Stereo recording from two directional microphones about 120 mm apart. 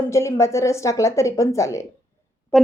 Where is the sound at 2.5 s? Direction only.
Centre (ahead or behind).